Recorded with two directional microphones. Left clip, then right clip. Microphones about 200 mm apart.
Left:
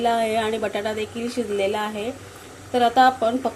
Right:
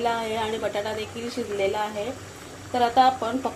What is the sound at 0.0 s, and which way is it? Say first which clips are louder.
Speech: left 5 dB; 30° left (ahead or behind).